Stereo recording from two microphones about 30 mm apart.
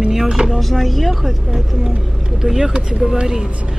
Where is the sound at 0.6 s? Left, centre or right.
Centre.